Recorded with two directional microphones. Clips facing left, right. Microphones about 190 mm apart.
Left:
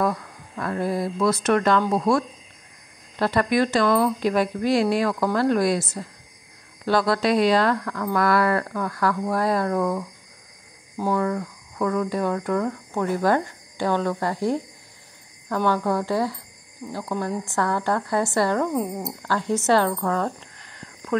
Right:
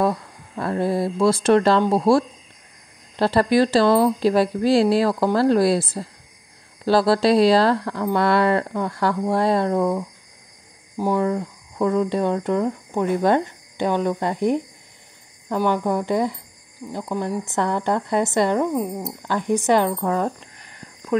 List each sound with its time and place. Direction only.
0.0 s a woman's voice: 30° right (ahead or behind); by 19.1 s 5° right (ahead or behind)
19.2 s speech: 15° right (ahead or behind)